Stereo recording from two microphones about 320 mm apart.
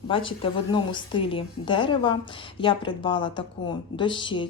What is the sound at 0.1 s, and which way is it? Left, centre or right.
A woman's voice, centre.